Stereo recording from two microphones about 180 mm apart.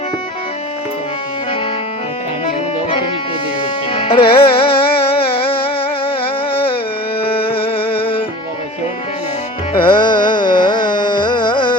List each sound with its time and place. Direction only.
3.9 s music: 30° left (ahead or behind)
7.2 s a sound: 30° left (ahead or behind)
9.7 s carnatic music: 30° left (ahead or behind)